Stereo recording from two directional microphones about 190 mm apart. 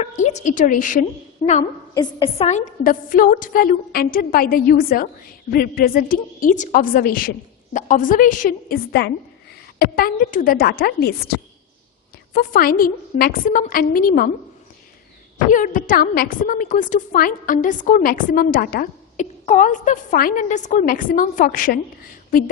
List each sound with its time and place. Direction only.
0.0 s a woman's voice: 35° left (ahead or behind)
1.9 s a woman's voice: 25° left (ahead or behind); by 14.3 s 50° left (ahead or behind)
15.5 s a woman's voice: 45° left (ahead or behind)